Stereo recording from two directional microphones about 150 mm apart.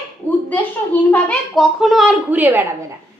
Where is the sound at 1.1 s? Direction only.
5° left (ahead or behind); by 2.6 s 15° right (ahead or behind).